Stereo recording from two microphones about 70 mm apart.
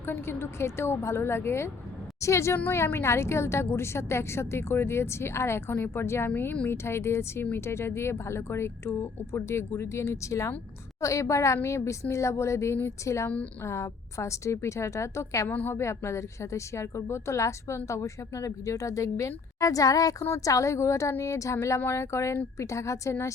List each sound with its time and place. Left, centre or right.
0.0 s a woman's voice: left
15.4 s a woman's voice: left
15.8 s a woman's voice: left